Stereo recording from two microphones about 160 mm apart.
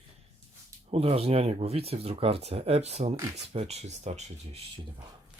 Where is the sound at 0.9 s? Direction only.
35° right (ahead or behind).